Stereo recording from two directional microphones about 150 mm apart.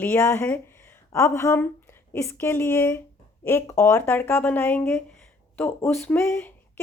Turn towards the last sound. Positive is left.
turn(degrees=15)  # may be behind; listen again after turning